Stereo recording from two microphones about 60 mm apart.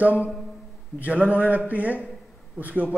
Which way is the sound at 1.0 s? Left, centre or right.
Right.